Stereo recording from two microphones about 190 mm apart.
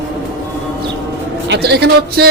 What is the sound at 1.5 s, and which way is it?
Speech, 60° right (ahead or behind).